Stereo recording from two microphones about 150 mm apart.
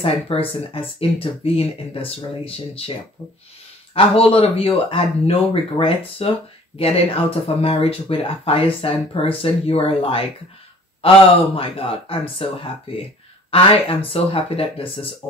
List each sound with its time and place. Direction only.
0.0 s speech: 40° left (ahead or behind)
3.9 s speech: 40° left (ahead or behind)
13.5 s speech: 40° left (ahead or behind)